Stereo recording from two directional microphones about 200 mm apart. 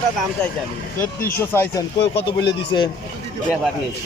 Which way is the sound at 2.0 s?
60° left (ahead or behind).